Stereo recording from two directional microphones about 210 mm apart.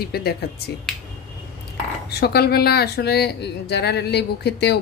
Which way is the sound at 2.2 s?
50° left (ahead or behind).